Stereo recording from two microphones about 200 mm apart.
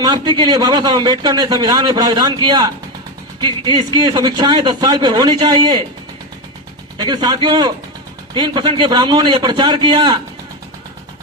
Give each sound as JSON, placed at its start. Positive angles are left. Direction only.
{"t": 0.0, "sound": "a man's voice", "side_deg": -20}
{"t": 7.0, "sound": "a man's voice", "side_deg": -20}